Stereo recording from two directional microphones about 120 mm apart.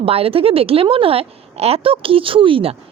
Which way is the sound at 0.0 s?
55° right (ahead or behind).